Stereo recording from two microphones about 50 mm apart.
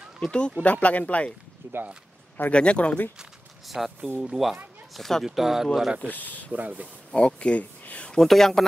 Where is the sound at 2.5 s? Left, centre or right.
Left.